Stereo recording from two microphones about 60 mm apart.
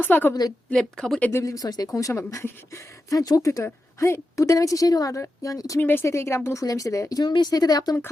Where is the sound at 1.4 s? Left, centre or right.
Left.